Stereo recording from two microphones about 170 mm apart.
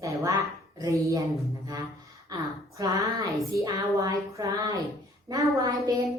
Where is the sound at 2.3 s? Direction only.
25° right (ahead or behind).